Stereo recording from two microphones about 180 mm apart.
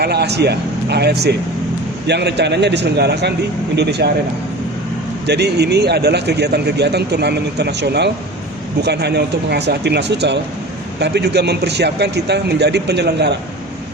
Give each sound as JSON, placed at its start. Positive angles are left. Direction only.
{"t": 0.0, "sound": "a man's voice", "side_deg": -65}
{"t": 5.2, "sound": "a man's voice", "side_deg": -65}